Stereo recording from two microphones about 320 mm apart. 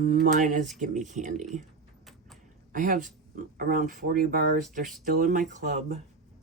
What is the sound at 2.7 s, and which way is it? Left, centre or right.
Speech, right.